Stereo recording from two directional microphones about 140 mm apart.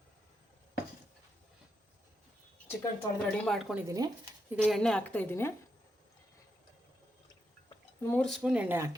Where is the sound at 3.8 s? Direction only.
25° right (ahead or behind).